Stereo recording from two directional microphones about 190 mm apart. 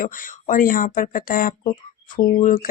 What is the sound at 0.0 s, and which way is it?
Speech, 45° left (ahead or behind).